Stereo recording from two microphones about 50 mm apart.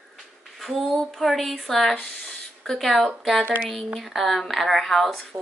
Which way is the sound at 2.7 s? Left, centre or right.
Centre.